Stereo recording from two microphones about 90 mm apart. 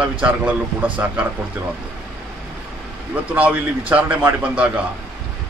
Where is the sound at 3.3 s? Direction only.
15° right (ahead or behind).